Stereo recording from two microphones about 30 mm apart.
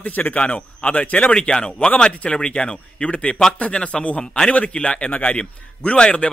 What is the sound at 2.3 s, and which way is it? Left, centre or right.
A man's voice, left.